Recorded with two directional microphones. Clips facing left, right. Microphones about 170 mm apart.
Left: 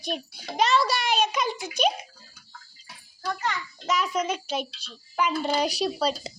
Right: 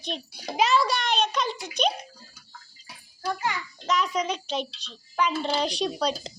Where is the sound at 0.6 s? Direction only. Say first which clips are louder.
Even; centre (ahead or behind).